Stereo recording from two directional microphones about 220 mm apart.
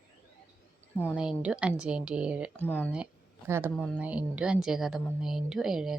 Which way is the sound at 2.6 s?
10° left (ahead or behind).